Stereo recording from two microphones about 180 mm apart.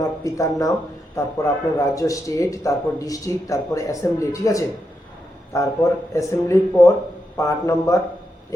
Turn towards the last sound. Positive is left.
turn(degrees=15)  # may be behind; listen again after turning